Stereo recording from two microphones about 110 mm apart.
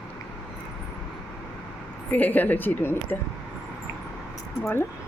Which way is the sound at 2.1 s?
15° left (ahead or behind).